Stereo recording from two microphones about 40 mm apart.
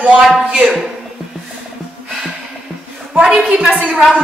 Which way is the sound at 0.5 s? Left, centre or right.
Right.